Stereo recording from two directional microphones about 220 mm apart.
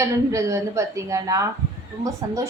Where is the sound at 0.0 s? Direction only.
15° right (ahead or behind).